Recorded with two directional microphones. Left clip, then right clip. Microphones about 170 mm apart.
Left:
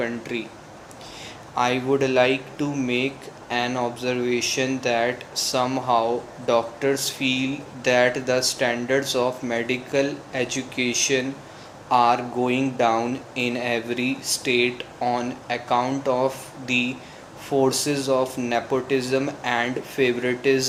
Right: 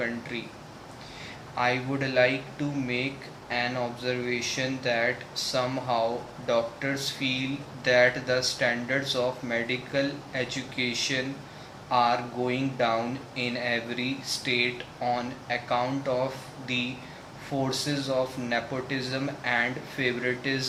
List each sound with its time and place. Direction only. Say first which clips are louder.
0.0 s speech: left 5 dB; 40° left (ahead or behind)
1.5 s speech: left 6 dB; 40° left (ahead or behind)
17.7 s speech: left 7 dB; 40° left (ahead or behind)